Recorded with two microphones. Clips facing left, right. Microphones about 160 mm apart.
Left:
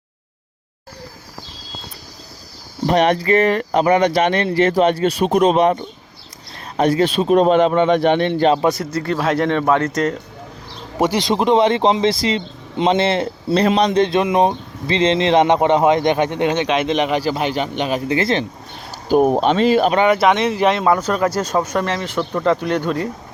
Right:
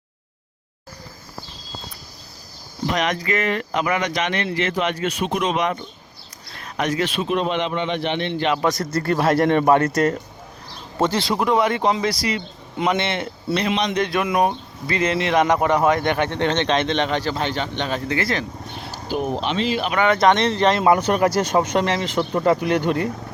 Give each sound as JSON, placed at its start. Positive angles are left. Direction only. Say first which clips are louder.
{"t": 2.8, "sound": "speech", "louder": "left 7 dB", "side_deg": 35}
{"t": 8.8, "sound": "speech", "louder": "left 1 dB", "side_deg": -45}
{"t": 9.0, "sound": "speech", "louder": "right 1 dB", "side_deg": -10}
{"t": 10.9, "sound": "speech", "louder": "left 3 dB", "side_deg": 15}
{"t": 19.0, "sound": "speech", "louder": "left 10 dB", "side_deg": 50}
{"t": 20.1, "sound": "speech", "louder": "left 2 dB", "side_deg": 5}
{"t": 21.5, "sound": "speech", "louder": "even", "side_deg": -15}